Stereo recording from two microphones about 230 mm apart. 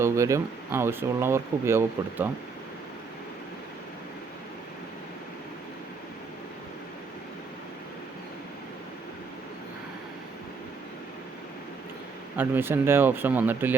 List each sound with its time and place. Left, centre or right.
0.0 s speech: centre
12.4 s speech: centre